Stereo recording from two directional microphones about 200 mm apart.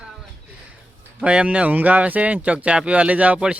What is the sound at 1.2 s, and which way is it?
Speech, 5° right (ahead or behind).